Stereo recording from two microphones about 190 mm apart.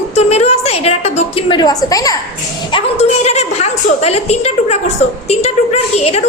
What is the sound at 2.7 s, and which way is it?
A woman's voice, 35° left (ahead or behind).